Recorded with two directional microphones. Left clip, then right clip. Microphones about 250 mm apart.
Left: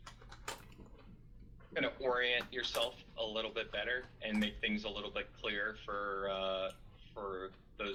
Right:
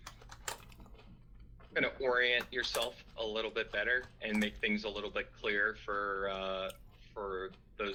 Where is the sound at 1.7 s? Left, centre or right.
Right.